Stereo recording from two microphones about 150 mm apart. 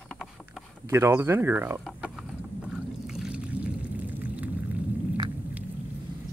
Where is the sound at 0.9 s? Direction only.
15° right (ahead or behind).